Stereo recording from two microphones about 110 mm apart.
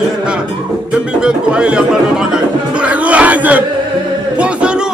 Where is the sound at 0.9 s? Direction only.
10° right (ahead or behind).